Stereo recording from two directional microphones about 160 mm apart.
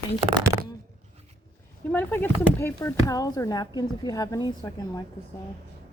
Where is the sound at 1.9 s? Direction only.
10° left (ahead or behind).